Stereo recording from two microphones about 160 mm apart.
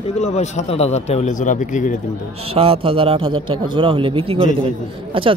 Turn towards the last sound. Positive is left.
turn(degrees=-35)  # may be behind; listen again after turning